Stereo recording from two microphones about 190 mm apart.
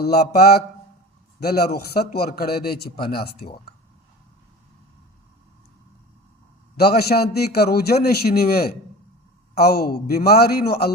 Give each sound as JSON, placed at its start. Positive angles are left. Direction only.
{"t": 0.0, "sound": "a man's voice", "side_deg": 55}
{"t": 6.7, "sound": "a man's voice", "side_deg": 55}